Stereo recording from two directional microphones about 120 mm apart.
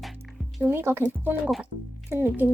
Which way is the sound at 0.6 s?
20° right (ahead or behind).